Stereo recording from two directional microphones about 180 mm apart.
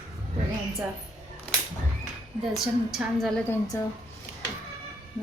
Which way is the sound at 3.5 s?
20° left (ahead or behind).